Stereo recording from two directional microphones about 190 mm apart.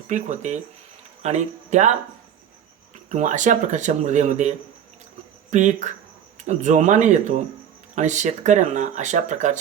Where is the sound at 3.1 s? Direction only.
40° right (ahead or behind).